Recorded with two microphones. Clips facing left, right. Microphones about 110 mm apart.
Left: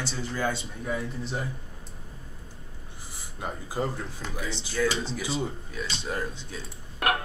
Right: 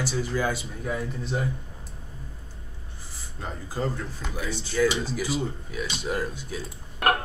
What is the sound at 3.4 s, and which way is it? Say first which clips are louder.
Speech: even; 15° left (ahead or behind).